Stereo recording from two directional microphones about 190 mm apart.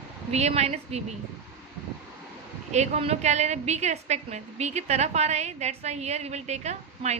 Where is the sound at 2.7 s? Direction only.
35° right (ahead or behind).